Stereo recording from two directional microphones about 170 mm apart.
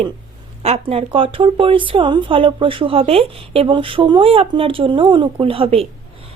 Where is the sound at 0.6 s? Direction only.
35° right (ahead or behind).